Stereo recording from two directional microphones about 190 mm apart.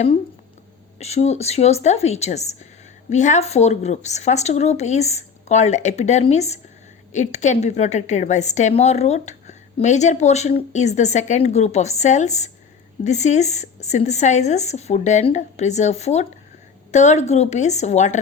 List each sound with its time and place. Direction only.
0.9 s speech: 35° left (ahead or behind)